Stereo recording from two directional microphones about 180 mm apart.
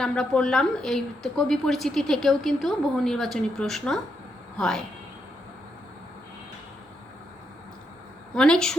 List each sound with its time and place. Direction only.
0.0 s speech: 5° left (ahead or behind)
8.4 s speech: 5° left (ahead or behind)